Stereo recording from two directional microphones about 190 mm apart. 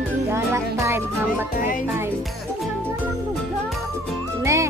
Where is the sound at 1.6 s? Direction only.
45° left (ahead or behind).